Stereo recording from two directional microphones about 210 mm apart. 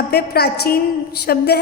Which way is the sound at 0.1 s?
50° left (ahead or behind).